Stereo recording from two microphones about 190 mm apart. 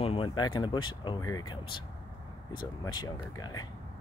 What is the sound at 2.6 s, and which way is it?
Speech, 20° left (ahead or behind).